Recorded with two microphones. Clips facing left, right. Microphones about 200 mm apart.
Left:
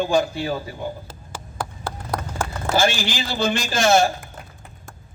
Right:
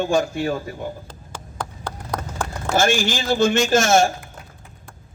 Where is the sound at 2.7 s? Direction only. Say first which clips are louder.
Right 2 dB; 50° right (ahead or behind).